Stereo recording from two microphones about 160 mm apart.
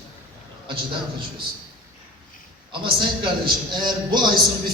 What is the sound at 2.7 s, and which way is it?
A man's voice, 30° right (ahead or behind).